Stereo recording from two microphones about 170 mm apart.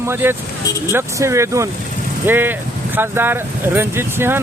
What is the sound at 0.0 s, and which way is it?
Speech, 15° right (ahead or behind).